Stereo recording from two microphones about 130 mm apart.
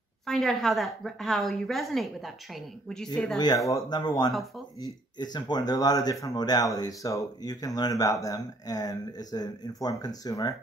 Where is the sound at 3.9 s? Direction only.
35° left (ahead or behind).